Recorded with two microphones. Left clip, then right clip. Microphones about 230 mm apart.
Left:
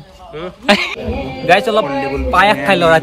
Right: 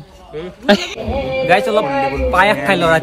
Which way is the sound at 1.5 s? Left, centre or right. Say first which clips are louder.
Left 3 dB; centre.